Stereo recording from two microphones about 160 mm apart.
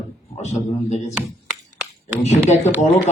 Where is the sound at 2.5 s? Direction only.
45° left (ahead or behind).